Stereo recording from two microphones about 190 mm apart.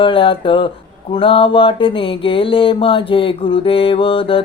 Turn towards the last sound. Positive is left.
turn(degrees=30)  # may be behind; listen again after turning